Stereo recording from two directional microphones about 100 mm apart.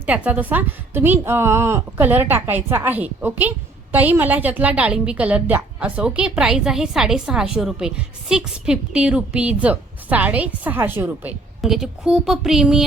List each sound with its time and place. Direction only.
0.0 s a woman's voice: 15° right (ahead or behind)
11.6 s a woman's voice: 5° right (ahead or behind)